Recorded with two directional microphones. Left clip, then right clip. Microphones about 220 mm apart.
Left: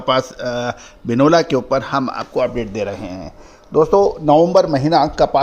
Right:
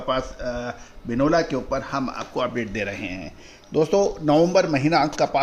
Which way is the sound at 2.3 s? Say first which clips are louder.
Left 7 dB; 20° left (ahead or behind).